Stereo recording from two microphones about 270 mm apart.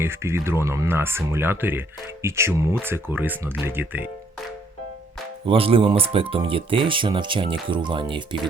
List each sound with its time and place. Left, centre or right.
0.0 s speech: centre
5.5 s speech: centre